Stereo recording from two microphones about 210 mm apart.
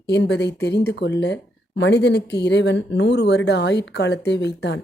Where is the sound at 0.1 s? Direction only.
55° left (ahead or behind).